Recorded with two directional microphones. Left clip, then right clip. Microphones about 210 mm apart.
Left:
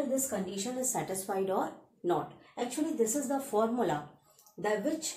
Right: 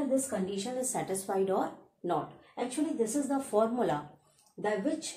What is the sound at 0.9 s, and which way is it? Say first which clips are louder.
A woman's voice: right 3 dB; 15° right (ahead or behind).